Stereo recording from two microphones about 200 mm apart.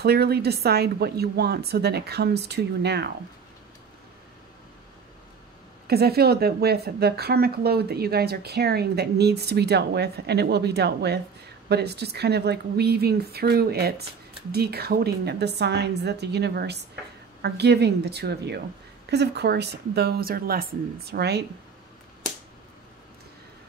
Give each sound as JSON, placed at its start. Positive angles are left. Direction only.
{"t": 0.0, "sound": "a woman's voice", "side_deg": -55}
{"t": 5.9, "sound": "a woman's voice", "side_deg": -50}